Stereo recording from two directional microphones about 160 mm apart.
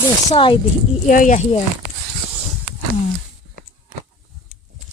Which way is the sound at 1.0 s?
55° left (ahead or behind).